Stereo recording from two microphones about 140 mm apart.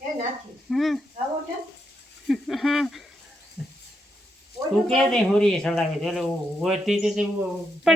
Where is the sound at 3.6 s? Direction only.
5° left (ahead or behind).